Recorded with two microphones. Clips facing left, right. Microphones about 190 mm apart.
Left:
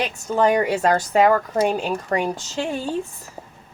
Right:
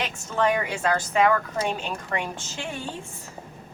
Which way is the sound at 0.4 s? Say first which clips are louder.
Left 6 dB; 40° left (ahead or behind).